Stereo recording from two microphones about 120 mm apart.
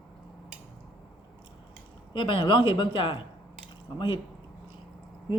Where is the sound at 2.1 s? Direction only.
40° left (ahead or behind).